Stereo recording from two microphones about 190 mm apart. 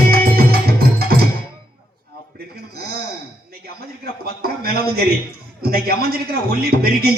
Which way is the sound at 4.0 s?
50° right (ahead or behind).